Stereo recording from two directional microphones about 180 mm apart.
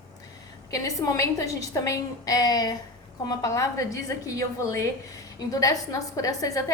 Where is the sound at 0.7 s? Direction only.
15° left (ahead or behind).